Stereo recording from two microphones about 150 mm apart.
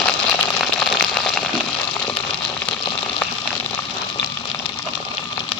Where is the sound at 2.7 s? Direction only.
10° left (ahead or behind).